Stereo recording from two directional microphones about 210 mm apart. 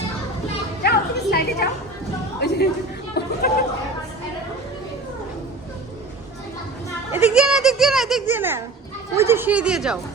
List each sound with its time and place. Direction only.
0.8 s music: 50° left (ahead or behind)
2.4 s chatter: 50° left (ahead or behind)
7.1 s music: 5° right (ahead or behind)
9.1 s speech: 10° right (ahead or behind)